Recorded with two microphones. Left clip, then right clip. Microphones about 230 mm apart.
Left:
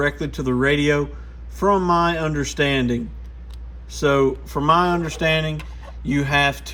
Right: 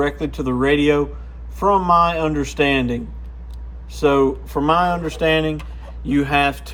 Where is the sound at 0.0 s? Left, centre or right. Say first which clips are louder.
Right 1 dB; left.